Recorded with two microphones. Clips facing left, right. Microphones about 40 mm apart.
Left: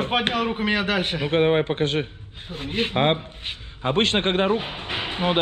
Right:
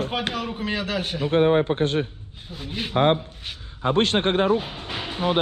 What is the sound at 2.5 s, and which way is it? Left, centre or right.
Speech, left.